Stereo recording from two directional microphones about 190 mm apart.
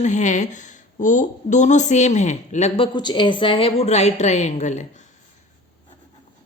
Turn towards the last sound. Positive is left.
turn(degrees=40)  # may be behind; listen again after turning